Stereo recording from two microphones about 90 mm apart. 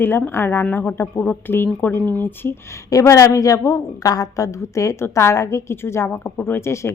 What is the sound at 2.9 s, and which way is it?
A woman's voice, 35° left (ahead or behind).